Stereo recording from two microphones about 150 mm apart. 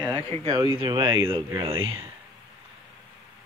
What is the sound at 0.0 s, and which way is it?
Speech, 35° right (ahead or behind).